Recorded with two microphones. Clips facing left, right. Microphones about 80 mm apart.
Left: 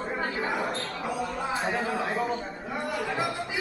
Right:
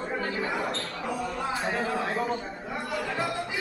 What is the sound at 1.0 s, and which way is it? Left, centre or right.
A man's voice, centre.